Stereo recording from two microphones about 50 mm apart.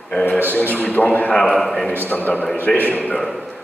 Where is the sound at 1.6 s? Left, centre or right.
Centre.